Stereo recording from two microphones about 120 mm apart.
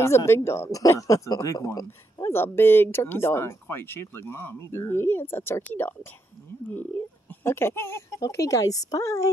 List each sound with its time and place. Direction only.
0.0 s speech: 25° left (ahead or behind)
7.2 s speech: 20° left (ahead or behind)